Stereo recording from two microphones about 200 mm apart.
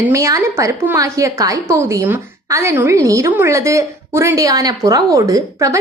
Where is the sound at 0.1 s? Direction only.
15° right (ahead or behind).